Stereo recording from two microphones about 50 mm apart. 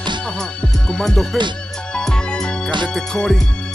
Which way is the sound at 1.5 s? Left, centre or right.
Centre.